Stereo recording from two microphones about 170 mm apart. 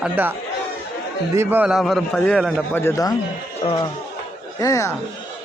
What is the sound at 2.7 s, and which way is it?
Speech, 15° left (ahead or behind).